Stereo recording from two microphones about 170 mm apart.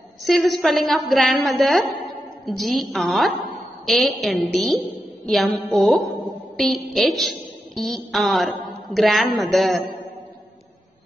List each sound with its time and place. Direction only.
0.2 s a woman's voice: centre (ahead or behind)